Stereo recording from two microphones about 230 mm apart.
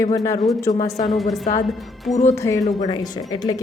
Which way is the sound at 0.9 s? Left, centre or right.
Left.